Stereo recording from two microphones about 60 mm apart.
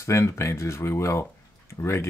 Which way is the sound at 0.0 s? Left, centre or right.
Left.